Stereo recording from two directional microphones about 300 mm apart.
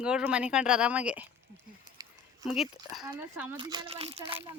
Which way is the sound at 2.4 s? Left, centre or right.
Centre.